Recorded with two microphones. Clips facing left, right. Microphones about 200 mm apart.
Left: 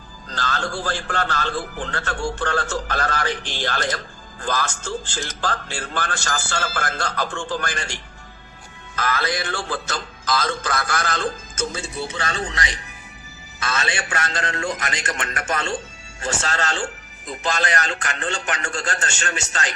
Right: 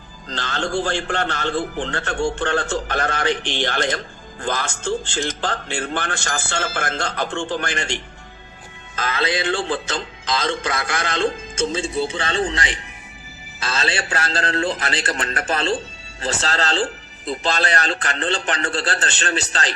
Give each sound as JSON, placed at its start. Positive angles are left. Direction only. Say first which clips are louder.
{"t": 0.3, "sound": "a man's voice", "louder": "right 2 dB", "side_deg": -25}